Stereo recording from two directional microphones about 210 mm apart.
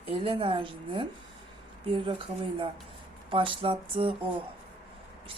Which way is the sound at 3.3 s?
25° right (ahead or behind).